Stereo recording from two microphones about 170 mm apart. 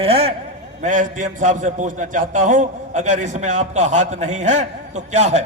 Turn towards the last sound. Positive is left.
turn(degrees=-40)  # may be behind; listen again after turning